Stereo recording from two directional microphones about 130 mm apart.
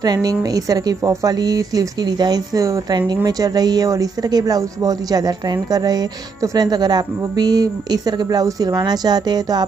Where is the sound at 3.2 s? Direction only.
30° right (ahead or behind).